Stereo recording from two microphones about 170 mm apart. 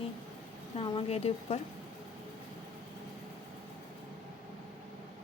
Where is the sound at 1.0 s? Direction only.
35° left (ahead or behind).